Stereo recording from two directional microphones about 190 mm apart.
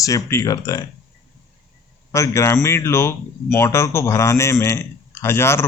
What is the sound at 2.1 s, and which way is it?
Speech, 15° left (ahead or behind).